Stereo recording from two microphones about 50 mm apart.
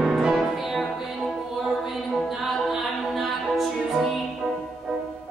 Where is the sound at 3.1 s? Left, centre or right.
Centre.